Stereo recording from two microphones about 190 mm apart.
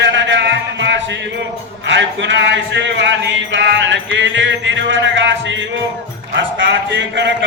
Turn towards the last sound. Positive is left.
turn(degrees=-70)  # may be behind; listen again after turning